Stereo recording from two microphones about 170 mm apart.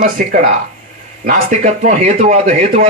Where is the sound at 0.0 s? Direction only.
55° right (ahead or behind).